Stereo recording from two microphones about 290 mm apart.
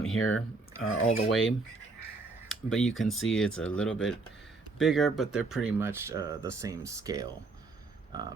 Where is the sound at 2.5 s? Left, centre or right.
Centre.